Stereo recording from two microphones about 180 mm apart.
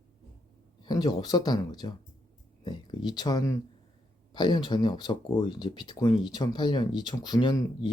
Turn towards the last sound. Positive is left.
turn(degrees=25)  # may be behind; listen again after turning